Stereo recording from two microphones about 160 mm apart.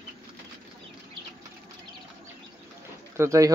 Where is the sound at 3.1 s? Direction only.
20° right (ahead or behind).